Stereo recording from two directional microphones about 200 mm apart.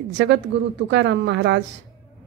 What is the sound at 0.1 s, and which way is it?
A woman's voice, 60° right (ahead or behind).